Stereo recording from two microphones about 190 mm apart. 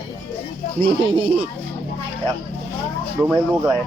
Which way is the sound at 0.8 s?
30° right (ahead or behind).